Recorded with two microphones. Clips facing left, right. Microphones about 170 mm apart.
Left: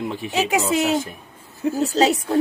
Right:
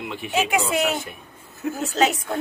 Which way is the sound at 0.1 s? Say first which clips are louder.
Right 1 dB; 35° left (ahead or behind).